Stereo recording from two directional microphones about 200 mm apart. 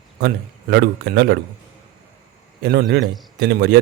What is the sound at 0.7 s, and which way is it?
Speech, 55° right (ahead or behind).